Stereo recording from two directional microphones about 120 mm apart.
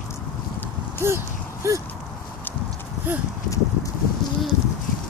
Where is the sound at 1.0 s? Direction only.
25° right (ahead or behind).